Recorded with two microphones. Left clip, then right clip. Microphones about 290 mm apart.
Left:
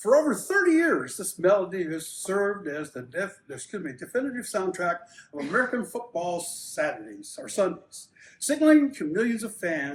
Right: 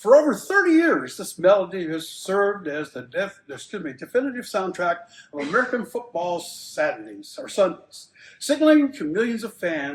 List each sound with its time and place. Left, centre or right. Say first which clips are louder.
0.0 s speech: right 6 dB; centre